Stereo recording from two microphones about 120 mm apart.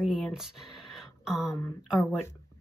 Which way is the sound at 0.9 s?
5° right (ahead or behind).